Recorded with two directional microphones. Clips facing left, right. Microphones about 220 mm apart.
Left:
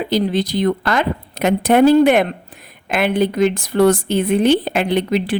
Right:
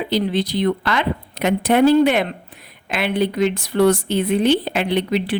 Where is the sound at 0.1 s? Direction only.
45° left (ahead or behind).